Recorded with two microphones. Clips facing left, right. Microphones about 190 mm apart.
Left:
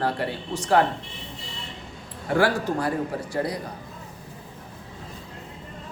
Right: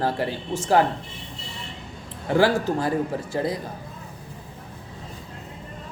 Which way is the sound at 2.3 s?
25° right (ahead or behind).